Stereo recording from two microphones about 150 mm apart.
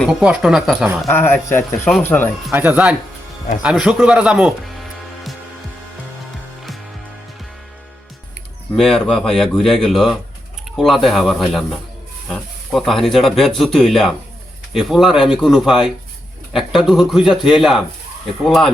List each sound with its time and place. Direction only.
0.1 s speech: 5° right (ahead or behind)
1.0 s speech: 15° left (ahead or behind)
1.8 s speech: 5° left (ahead or behind)
2.0 s speech: 15° left (ahead or behind)
2.5 s speech: 10° right (ahead or behind)
8.7 s speech: 5° left (ahead or behind)